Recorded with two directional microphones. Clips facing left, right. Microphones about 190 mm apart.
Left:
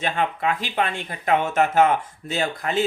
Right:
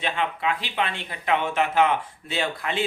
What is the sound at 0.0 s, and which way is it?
Speech, 45° left (ahead or behind).